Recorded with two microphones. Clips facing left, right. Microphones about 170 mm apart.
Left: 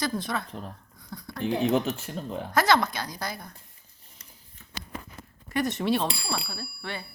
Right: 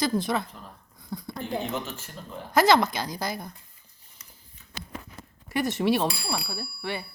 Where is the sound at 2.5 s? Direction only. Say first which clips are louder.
Right 3 dB; 5° right (ahead or behind).